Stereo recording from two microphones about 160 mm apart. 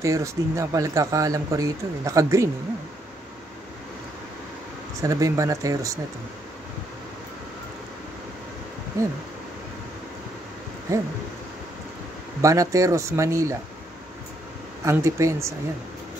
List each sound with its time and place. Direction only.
0.0 s speech: 20° right (ahead or behind)
5.0 s speech: 20° right (ahead or behind)
10.9 s speech: 20° right (ahead or behind)
12.4 s speech: 20° right (ahead or behind)
14.9 s speech: 20° right (ahead or behind)